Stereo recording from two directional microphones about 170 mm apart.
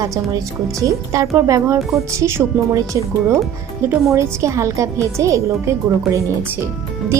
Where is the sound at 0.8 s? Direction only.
20° right (ahead or behind).